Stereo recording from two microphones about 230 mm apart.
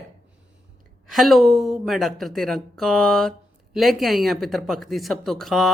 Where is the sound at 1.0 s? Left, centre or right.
Centre.